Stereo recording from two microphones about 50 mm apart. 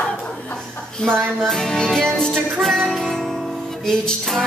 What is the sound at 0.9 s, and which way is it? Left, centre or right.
A man's voice, centre.